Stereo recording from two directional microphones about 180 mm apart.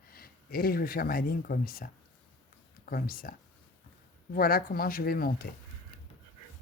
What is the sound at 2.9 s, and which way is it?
Speech, 55° left (ahead or behind).